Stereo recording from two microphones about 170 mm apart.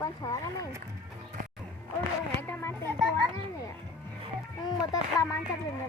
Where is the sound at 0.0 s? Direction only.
20° left (ahead or behind).